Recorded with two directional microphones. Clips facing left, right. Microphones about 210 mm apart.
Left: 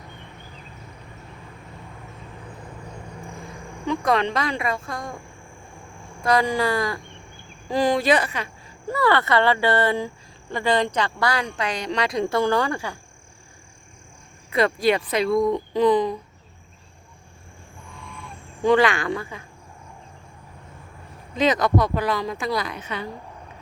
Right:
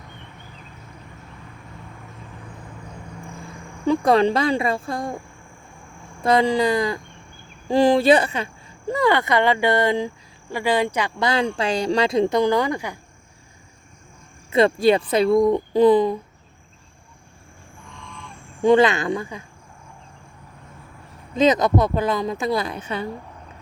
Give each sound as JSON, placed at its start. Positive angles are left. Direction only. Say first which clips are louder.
{"t": 3.8, "sound": "speech", "louder": "right 5 dB", "side_deg": -30}
{"t": 6.2, "sound": "speech", "louder": "right 3 dB", "side_deg": -25}
{"t": 7.7, "sound": "speech", "louder": "right 5 dB", "side_deg": -30}
{"t": 8.9, "sound": "speech", "louder": "right 1 dB", "side_deg": -15}
{"t": 11.2, "sound": "speech", "louder": "right 3 dB", "side_deg": -25}
{"t": 14.5, "sound": "speech", "louder": "right 4 dB", "side_deg": -25}
{"t": 18.6, "sound": "speech", "louder": "right 3 dB", "side_deg": -20}
{"t": 21.4, "sound": "speech", "louder": "right 3 dB", "side_deg": -20}